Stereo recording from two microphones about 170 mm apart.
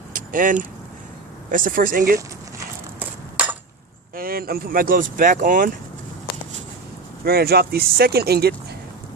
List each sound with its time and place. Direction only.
0.1 s vehicle: 50° right (ahead or behind)
1.5 s speech: 55° right (ahead or behind)
2.1 s chop: 15° right (ahead or behind)
4.1 s speech: 60° right (ahead or behind)
7.3 s speech: 65° right (ahead or behind)